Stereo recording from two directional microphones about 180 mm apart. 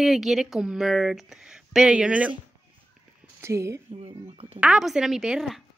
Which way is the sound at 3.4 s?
15° right (ahead or behind).